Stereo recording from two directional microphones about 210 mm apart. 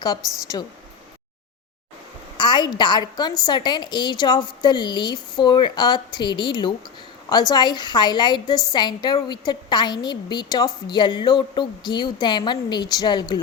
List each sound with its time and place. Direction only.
0.5 s a woman's voice: 20° left (ahead or behind)
2.4 s a woman's voice: 20° left (ahead or behind)